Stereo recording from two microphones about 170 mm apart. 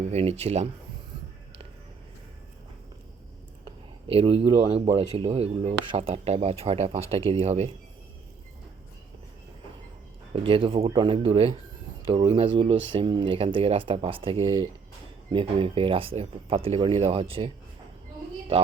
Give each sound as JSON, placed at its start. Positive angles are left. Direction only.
{"t": 0.1, "sound": "speech", "side_deg": -35}
{"t": 4.1, "sound": "speech", "side_deg": -35}
{"t": 10.3, "sound": "speech", "side_deg": -30}